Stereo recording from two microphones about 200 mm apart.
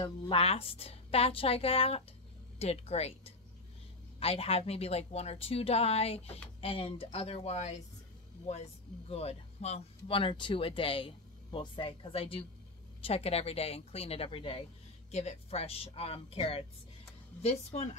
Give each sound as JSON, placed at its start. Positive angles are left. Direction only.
{"t": 0.0, "sound": "a woman's voice", "side_deg": 30}
{"t": 9.1, "sound": "a woman's voice", "side_deg": 30}